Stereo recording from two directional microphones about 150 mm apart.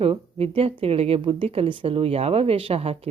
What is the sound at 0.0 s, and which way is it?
A woman's voice, 40° right (ahead or behind).